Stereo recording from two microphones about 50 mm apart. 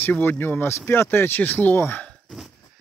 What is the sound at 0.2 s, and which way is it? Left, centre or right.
Speech, left.